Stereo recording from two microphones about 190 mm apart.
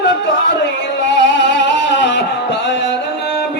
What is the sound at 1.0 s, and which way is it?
Music, 70° left (ahead or behind).